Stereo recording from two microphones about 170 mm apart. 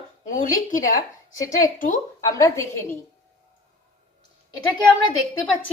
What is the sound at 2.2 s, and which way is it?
Speech, 15° left (ahead or behind).